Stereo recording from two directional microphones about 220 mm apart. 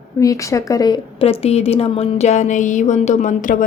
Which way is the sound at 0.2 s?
15° left (ahead or behind).